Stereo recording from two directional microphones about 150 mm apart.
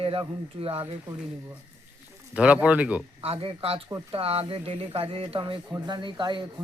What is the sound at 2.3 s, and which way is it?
Speech, 10° right (ahead or behind).